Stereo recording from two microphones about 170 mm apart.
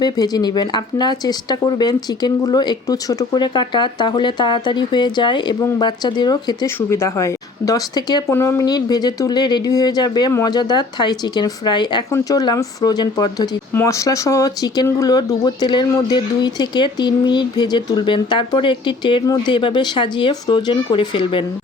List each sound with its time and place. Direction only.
0.0 s speech: 25° left (ahead or behind)